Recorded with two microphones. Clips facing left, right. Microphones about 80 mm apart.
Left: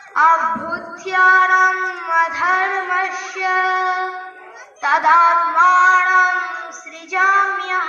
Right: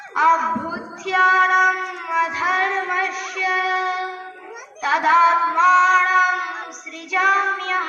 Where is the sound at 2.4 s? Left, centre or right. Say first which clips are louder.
Left 3 dB; left.